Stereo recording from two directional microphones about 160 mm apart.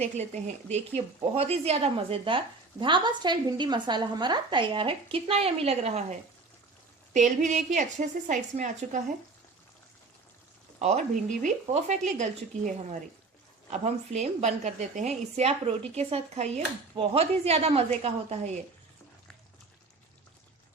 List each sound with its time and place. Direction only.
0.0 s a woman's voice: 45° right (ahead or behind)
10.8 s a woman's voice: 45° right (ahead or behind)